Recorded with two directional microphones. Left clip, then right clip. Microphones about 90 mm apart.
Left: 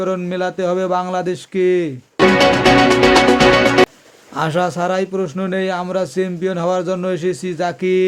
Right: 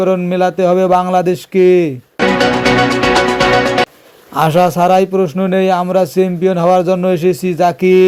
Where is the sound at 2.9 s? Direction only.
Centre (ahead or behind).